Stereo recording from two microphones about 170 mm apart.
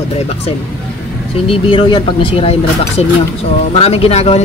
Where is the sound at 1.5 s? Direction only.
30° left (ahead or behind).